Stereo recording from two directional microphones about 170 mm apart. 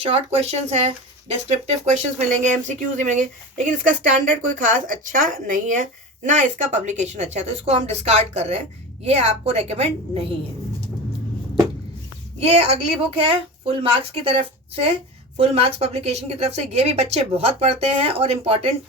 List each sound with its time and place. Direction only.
0.0 s a woman's voice: 35° right (ahead or behind)
12.4 s a woman's voice: 35° right (ahead or behind)